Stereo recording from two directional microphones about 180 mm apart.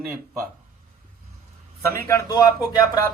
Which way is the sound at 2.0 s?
15° left (ahead or behind).